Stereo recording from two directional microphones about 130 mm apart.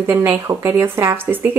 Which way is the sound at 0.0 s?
15° right (ahead or behind).